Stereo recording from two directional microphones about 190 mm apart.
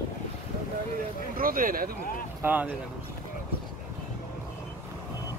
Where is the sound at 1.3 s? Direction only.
50° right (ahead or behind).